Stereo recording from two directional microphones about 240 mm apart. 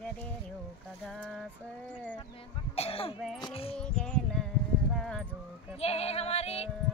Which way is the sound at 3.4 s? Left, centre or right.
Left.